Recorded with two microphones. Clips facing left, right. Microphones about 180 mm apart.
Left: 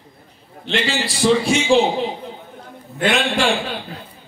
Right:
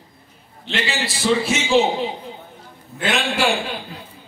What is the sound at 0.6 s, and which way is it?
A man's voice, centre (ahead or behind).